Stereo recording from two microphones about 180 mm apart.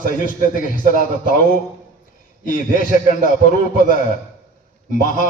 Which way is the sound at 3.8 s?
45° left (ahead or behind).